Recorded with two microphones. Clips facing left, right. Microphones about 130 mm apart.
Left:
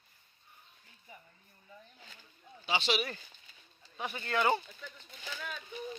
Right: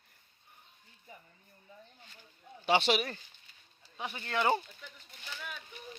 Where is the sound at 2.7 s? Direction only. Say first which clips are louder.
Right 5 dB; 55° right (ahead or behind).